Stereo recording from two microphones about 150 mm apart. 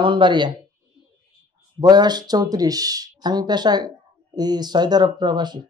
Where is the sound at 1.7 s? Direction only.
30° right (ahead or behind).